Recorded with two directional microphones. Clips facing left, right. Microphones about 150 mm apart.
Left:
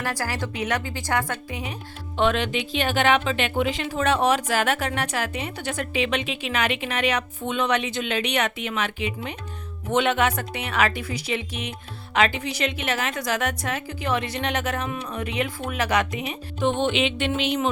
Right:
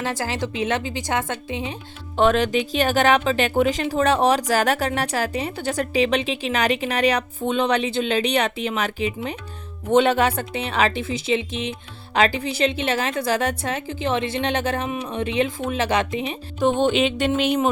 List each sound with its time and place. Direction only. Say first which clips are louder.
0.0 s a woman's voice: right 3 dB; 20° right (ahead or behind)
2.1 s a woman's voice: right 4 dB; 40° right (ahead or behind)
16.6 s speech: right 4 dB; 40° right (ahead or behind)